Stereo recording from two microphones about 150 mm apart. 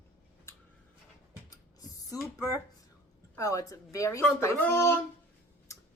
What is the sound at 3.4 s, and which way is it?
A woman's voice, 20° left (ahead or behind).